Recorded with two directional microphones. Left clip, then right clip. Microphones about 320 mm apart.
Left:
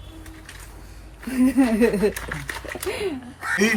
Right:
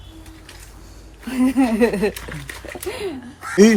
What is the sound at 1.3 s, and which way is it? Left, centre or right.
Speech, centre.